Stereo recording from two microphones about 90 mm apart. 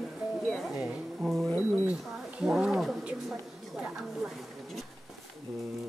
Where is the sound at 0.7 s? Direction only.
10° right (ahead or behind).